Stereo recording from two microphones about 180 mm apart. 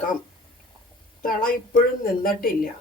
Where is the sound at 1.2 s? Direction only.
50° left (ahead or behind).